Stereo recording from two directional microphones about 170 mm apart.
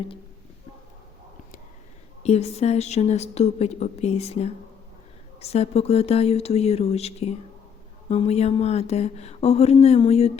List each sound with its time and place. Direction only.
2.2 s a woman's voice: 40° left (ahead or behind)